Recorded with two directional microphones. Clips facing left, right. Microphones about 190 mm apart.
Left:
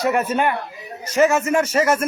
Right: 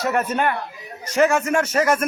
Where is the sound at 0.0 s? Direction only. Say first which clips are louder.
Left 2 dB; 10° left (ahead or behind).